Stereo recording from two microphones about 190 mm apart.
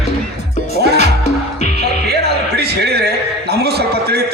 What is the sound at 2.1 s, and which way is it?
Music, 60° right (ahead or behind).